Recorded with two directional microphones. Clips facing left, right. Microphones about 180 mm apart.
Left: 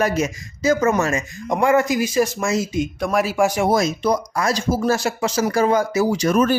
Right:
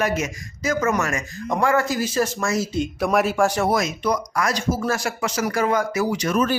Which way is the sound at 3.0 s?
Centre (ahead or behind).